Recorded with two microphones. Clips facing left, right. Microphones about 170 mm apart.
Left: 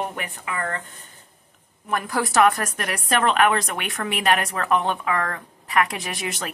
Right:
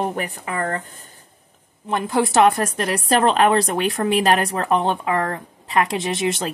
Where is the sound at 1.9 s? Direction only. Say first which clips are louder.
Right 5 dB; 25° right (ahead or behind).